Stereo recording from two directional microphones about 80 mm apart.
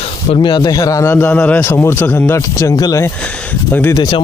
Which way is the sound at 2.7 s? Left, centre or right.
Left.